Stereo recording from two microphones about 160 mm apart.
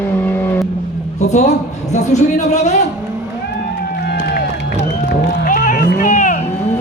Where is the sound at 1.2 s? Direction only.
45° left (ahead or behind).